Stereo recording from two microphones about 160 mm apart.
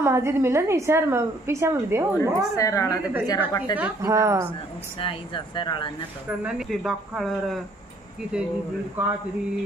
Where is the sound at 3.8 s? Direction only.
15° right (ahead or behind).